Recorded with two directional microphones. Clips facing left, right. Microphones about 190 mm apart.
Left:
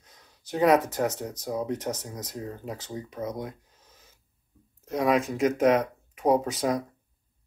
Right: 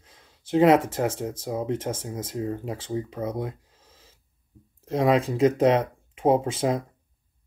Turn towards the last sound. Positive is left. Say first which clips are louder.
# right 2 dB
turn(degrees=-25)  # may be behind; listen again after turning